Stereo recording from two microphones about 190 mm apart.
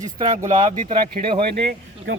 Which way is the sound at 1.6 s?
60° right (ahead or behind).